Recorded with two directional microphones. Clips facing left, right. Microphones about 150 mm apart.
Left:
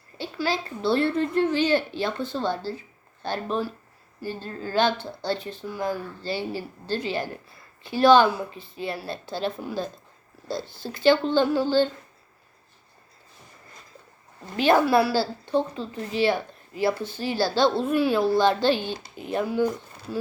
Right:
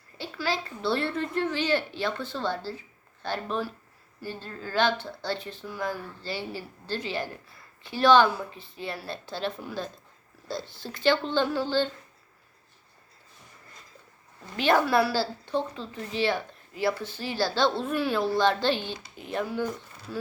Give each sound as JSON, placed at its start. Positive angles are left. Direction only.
{"t": 0.2, "sound": "a child's voice", "side_deg": 15}
{"t": 14.6, "sound": "speech", "side_deg": 10}